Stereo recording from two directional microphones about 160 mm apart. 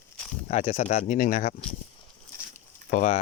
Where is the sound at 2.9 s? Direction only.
50° left (ahead or behind).